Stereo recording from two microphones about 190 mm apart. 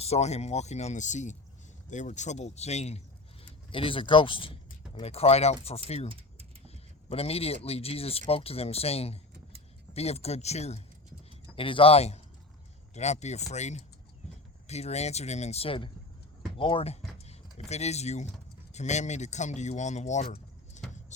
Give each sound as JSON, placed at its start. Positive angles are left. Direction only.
{"t": 0.0, "sound": "speech", "side_deg": 35}
{"t": 6.1, "sound": "a sound", "side_deg": -30}
{"t": 7.1, "sound": "speech", "side_deg": 30}